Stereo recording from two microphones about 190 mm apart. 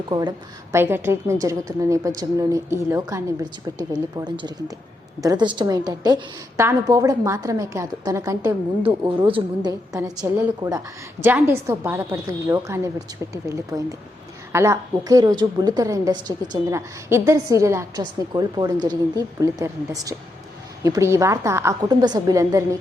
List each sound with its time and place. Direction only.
0.1 s a woman's voice: 20° right (ahead or behind)
8.8 s a woman's voice: 30° right (ahead or behind)